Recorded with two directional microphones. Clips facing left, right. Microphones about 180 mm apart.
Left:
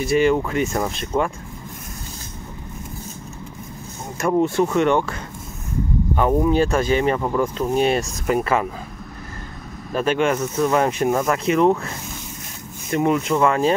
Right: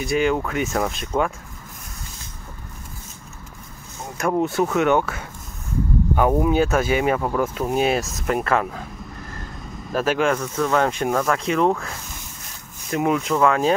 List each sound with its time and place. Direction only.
0.0 s speech: centre (ahead or behind)
4.2 s speech: centre (ahead or behind)
9.9 s speech: centre (ahead or behind)
12.9 s speech: centre (ahead or behind)